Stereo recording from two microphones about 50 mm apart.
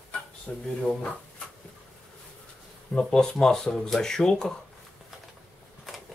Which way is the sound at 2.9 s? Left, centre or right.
Centre.